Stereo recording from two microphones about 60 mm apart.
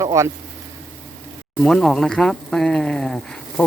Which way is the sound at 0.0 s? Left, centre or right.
Right.